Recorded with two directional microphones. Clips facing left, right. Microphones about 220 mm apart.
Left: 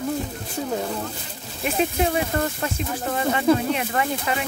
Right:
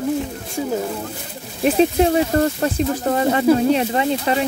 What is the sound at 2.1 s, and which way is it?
Speech, 35° right (ahead or behind).